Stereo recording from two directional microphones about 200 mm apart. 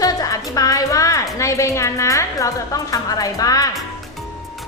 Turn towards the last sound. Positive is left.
turn(degrees=15)  # may be behind; listen again after turning